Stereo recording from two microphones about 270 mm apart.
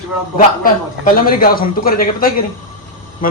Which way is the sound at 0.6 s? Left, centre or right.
Left.